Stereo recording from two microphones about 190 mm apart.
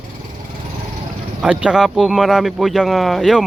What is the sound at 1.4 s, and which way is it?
Speech, 5° right (ahead or behind).